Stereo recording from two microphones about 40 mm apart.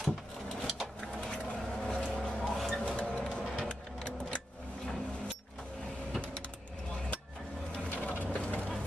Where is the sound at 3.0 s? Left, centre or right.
Left.